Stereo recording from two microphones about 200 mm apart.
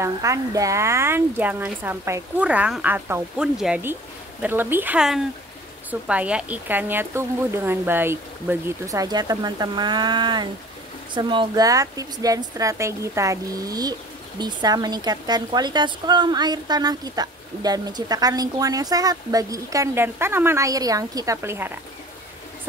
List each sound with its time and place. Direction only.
0.0 s a woman's voice: 15° right (ahead or behind)